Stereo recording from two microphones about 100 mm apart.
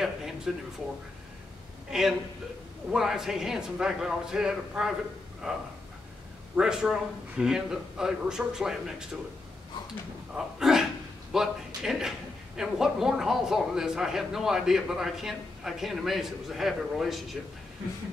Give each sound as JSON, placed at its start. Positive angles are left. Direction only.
{"t": 0.5, "sound": "a man's voice", "side_deg": -5}
{"t": 1.9, "sound": "a man's voice", "side_deg": -5}
{"t": 10.3, "sound": "a man's voice", "side_deg": -5}